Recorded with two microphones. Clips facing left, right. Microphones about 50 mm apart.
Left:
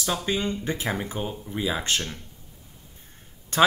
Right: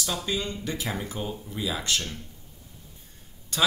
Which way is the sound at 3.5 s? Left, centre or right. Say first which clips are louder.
Left 6 dB; left.